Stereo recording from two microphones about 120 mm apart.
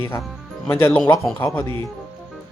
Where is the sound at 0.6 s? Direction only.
20° left (ahead or behind).